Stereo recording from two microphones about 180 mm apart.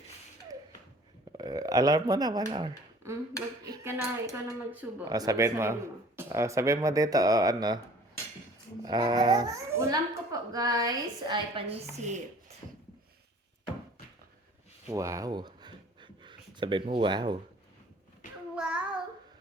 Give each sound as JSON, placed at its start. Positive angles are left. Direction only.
{"t": 1.4, "sound": "a woman's voice", "side_deg": -20}
{"t": 5.0, "sound": "a child's voice", "side_deg": -20}
{"t": 8.8, "sound": "a child's voice", "side_deg": -20}
{"t": 14.8, "sound": "a sound", "side_deg": -15}
{"t": 18.5, "sound": "child singing", "side_deg": -5}